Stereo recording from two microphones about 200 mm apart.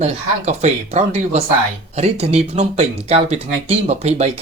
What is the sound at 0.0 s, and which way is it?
Speech, 35° right (ahead or behind).